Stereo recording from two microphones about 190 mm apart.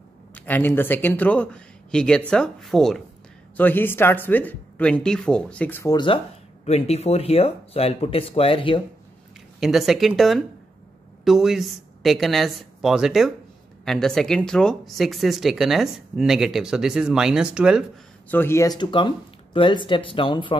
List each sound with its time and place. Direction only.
0.3 s speech: 10° left (ahead or behind)
6.6 s speech: 35° left (ahead or behind)
9.6 s speech: centre (ahead or behind)
18.3 s speech: 10° left (ahead or behind)